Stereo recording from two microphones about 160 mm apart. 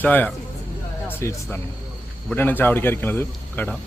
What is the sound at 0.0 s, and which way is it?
A man's voice, 10° left (ahead or behind).